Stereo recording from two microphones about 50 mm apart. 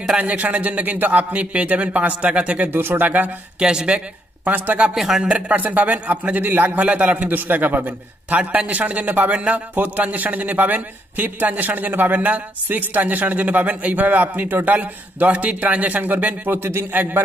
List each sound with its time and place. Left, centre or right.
0.2 s a man's voice: right
2.7 s speech: right
3.0 s a man's voice: right
3.5 s speech: centre
4.5 s a man's voice: right
4.9 s speech: centre
5.3 s a man's voice: right
6.8 s a man's voice: right